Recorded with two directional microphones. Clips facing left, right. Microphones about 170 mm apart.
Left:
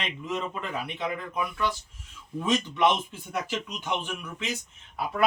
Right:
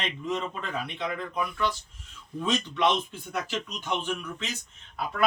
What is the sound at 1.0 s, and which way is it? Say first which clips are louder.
Speech: even; 10° left (ahead or behind).